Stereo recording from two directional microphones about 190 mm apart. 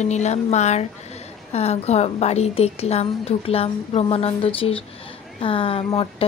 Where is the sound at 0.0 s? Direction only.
35° left (ahead or behind).